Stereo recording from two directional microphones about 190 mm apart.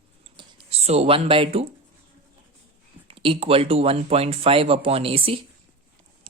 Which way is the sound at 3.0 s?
30° right (ahead or behind).